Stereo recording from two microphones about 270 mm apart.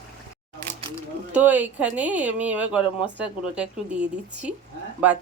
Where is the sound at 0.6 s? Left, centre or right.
Right.